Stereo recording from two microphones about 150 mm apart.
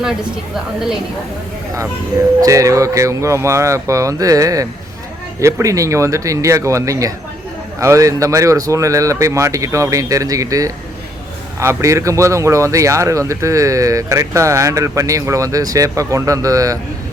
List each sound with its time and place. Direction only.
0.5 s a woman's voice: centre (ahead or behind)
2.4 s speech: 20° right (ahead or behind)